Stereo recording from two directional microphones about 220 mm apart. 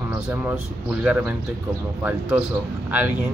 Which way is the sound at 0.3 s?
5° right (ahead or behind).